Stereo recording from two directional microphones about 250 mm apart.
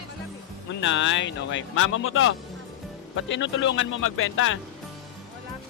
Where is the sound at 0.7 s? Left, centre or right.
Left.